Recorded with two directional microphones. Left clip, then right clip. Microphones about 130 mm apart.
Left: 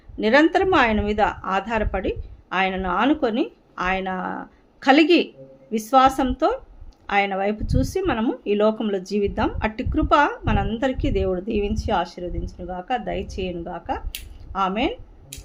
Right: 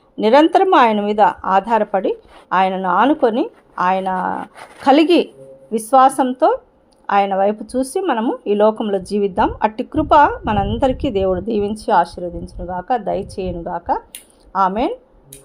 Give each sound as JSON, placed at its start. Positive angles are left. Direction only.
{"t": 0.2, "sound": "a woman's voice", "side_deg": -45}